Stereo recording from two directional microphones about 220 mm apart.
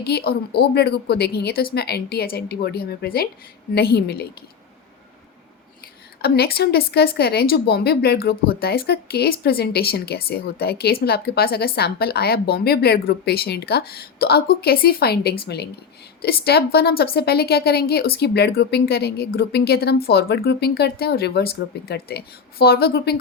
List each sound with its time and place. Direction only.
0.0 s a woman's voice: 45° left (ahead or behind)
6.2 s a woman's voice: 45° left (ahead or behind)